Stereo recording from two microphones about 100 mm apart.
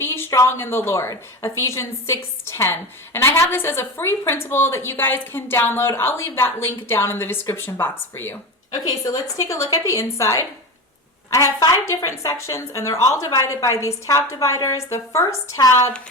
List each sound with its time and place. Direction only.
0.0 s a sound: 25° left (ahead or behind)
0.4 s a woman's voice: 25° left (ahead or behind)
9.0 s a woman's voice: 35° left (ahead or behind)